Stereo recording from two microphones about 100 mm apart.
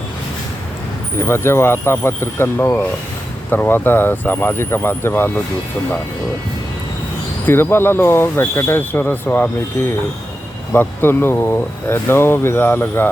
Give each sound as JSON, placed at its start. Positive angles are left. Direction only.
{"t": 1.2, "sound": "speech", "side_deg": 25}
{"t": 7.4, "sound": "speech", "side_deg": 20}